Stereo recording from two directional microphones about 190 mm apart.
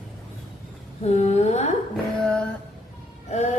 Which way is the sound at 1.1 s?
35° left (ahead or behind).